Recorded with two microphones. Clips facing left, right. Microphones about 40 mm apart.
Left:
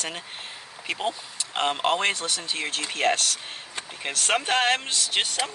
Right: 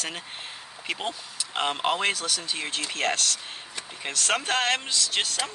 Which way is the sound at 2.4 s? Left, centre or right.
Centre.